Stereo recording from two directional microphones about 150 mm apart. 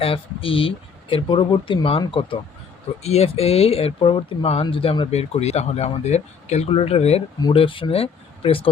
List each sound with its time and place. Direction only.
0.0 s speech: 35° left (ahead or behind)
3.0 s speech: 45° left (ahead or behind)